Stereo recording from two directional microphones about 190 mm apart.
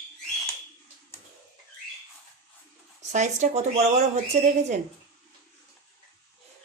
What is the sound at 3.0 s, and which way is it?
Speech, 40° right (ahead or behind).